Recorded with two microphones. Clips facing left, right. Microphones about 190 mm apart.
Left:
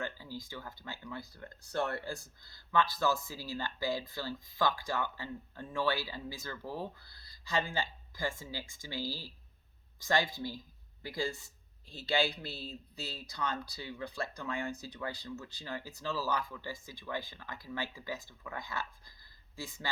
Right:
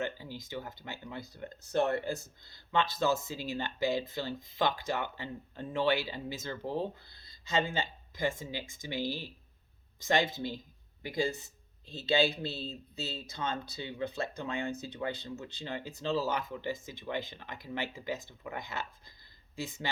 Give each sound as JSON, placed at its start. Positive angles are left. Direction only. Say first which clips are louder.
{"t": 0.0, "sound": "speech", "louder": "right 3 dB", "side_deg": -20}